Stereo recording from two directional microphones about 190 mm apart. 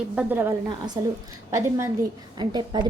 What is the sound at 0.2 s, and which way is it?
Speech, 10° right (ahead or behind).